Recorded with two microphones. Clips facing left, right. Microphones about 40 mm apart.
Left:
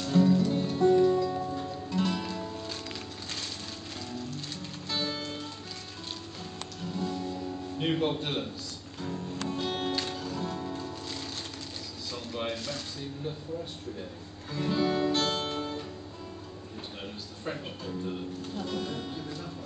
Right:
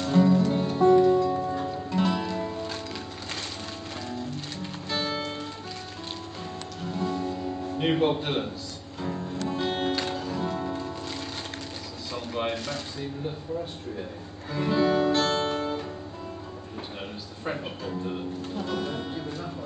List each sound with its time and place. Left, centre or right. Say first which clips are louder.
0.0 s music: right 3 dB; centre
4.8 s music: right 4 dB; centre
6.9 s music: right 4 dB; centre
9.5 s music: right 4 dB; centre
12.1 s a sound: right 5 dB; centre
14.5 s music: right 5 dB; centre
17.5 s speech: right 4 dB; right